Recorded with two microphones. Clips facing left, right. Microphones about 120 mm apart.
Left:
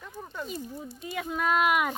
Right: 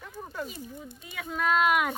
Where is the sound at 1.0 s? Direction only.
20° left (ahead or behind); by 1.9 s 5° left (ahead or behind).